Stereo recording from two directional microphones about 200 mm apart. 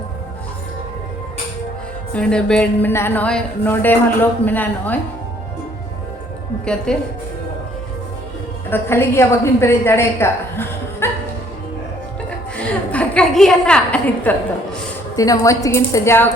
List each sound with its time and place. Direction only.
2.1 s a woman's voice: 5° left (ahead or behind)
6.9 s a woman's voice: 5° left (ahead or behind)
8.7 s a woman's voice: 10° left (ahead or behind)
12.5 s a sound: 5° left (ahead or behind)
15.1 s a woman's voice: 15° left (ahead or behind)